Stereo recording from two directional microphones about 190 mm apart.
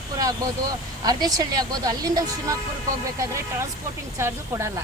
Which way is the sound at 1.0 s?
20° right (ahead or behind).